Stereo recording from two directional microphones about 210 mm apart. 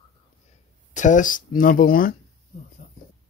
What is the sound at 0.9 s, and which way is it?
Speech, 35° left (ahead or behind).